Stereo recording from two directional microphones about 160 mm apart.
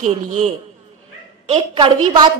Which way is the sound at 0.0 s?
50° right (ahead or behind).